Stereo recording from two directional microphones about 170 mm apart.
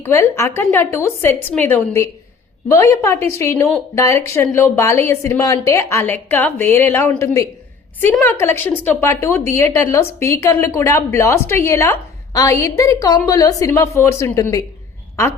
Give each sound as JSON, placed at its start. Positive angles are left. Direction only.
{"t": 0.0, "sound": "speech", "side_deg": 15}